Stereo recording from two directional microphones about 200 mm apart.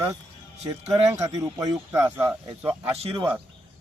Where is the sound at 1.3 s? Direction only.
15° right (ahead or behind).